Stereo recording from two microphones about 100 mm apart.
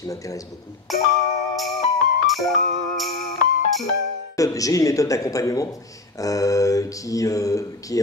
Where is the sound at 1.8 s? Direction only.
70° left (ahead or behind).